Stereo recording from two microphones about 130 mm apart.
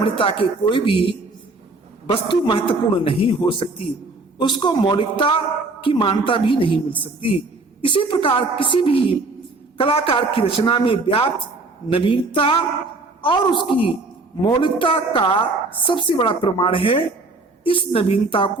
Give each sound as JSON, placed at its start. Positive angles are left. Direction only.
{"t": 0.0, "sound": "a man's voice", "side_deg": 40}
{"t": 7.8, "sound": "a woman's voice", "side_deg": 40}